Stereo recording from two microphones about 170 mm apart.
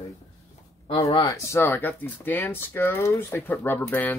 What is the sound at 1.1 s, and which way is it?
Speech, 30° left (ahead or behind).